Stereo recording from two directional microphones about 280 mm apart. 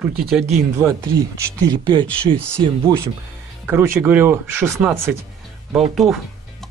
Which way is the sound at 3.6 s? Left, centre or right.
Centre.